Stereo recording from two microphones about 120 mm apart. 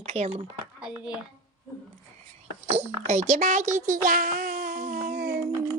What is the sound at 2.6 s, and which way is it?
A child's voice, 65° right (ahead or behind).